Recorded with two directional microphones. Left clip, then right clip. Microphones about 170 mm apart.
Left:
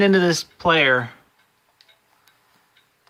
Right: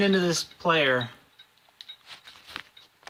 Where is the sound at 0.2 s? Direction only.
35° left (ahead or behind).